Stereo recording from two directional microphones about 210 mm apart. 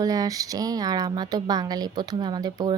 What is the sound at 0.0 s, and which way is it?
A woman's voice, 15° right (ahead or behind).